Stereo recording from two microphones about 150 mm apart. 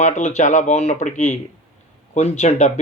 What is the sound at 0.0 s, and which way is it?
A man's voice, 50° left (ahead or behind).